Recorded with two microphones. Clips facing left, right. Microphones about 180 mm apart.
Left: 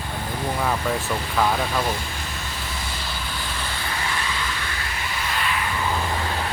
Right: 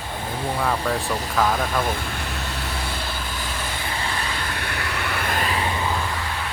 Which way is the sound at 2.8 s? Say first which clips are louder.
Right 3 dB; 60° right (ahead or behind).